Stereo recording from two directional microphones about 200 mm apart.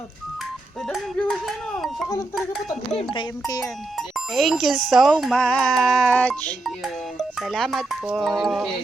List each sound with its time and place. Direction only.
0.9 s a child's voice: 5° left (ahead or behind)
2.9 s speech: 25° left (ahead or behind)
3.9 s a child's voice: centre (ahead or behind)